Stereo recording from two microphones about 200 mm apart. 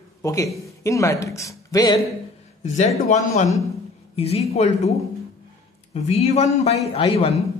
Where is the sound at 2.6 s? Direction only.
35° left (ahead or behind).